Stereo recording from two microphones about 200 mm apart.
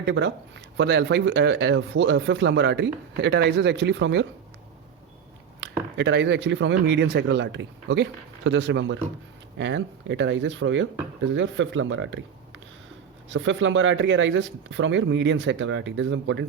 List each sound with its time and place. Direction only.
0.0 s speech: 60° right (ahead or behind)
6.0 s speech: 65° right (ahead or behind)
13.3 s speech: 70° right (ahead or behind)